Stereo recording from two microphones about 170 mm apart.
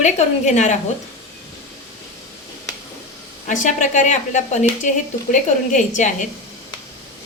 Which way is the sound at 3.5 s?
50° left (ahead or behind).